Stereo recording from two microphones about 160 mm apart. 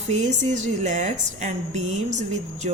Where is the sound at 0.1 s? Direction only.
50° right (ahead or behind).